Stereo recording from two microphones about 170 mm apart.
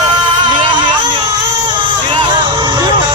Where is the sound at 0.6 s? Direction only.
30° right (ahead or behind).